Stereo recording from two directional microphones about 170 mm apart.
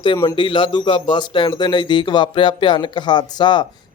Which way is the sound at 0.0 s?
25° left (ahead or behind).